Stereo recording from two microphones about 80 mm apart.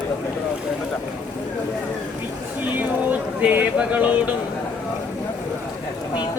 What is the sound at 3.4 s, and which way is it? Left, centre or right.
Speech, centre.